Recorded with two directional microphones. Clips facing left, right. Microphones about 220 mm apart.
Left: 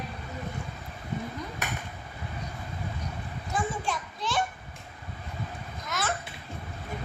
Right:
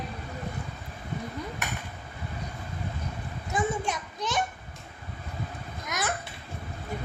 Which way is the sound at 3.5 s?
20° right (ahead or behind).